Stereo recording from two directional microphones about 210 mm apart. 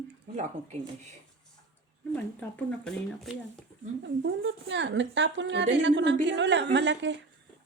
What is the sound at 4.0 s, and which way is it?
Speech, 60° right (ahead or behind).